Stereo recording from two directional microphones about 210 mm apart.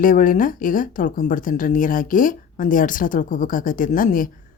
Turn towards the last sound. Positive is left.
turn(degrees=40)  # may be behind; listen again after turning